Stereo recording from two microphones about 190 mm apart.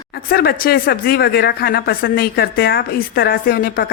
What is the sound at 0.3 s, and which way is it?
A woman's voice, 50° left (ahead or behind).